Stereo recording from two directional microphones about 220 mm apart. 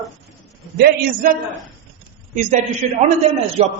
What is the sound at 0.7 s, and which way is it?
Speech, 40° right (ahead or behind).